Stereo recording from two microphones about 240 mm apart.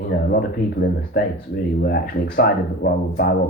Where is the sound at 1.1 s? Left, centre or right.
Left.